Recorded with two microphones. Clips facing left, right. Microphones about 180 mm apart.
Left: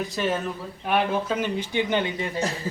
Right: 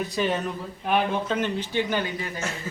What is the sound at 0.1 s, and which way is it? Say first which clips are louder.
A man's voice: even; centre (ahead or behind).